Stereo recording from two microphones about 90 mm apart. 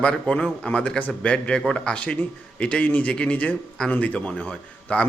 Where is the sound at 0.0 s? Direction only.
10° left (ahead or behind).